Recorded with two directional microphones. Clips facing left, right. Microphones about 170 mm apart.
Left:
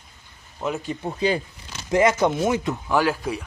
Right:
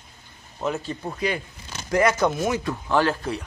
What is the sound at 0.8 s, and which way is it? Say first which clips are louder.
Speech: left 3 dB; 20° left (ahead or behind).